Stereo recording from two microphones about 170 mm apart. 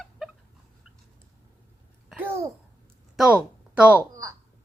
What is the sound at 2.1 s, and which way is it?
Babbling, 10° right (ahead or behind).